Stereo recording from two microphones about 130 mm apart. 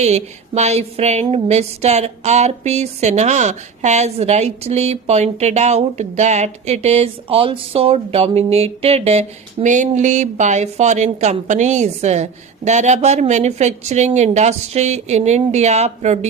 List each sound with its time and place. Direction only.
0.0 s a woman's voice: 60° right (ahead or behind)